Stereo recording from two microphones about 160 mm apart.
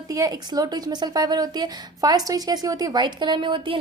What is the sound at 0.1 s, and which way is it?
A woman's voice, 20° right (ahead or behind).